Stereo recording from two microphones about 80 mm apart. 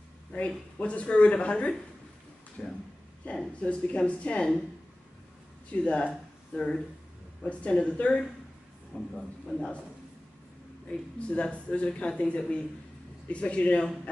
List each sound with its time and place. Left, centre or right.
0.3 s speech: centre
5.9 s speech: centre
10.9 s speech: centre